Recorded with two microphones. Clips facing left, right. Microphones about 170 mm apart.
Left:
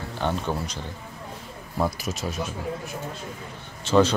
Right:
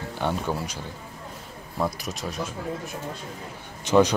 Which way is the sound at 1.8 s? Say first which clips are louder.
Left 2 dB; centre (ahead or behind).